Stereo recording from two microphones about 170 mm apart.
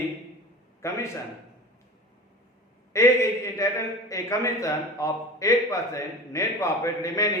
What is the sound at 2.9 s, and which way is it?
A man's voice, 15° left (ahead or behind).